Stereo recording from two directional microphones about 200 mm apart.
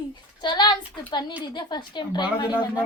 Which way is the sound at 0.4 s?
20° left (ahead or behind).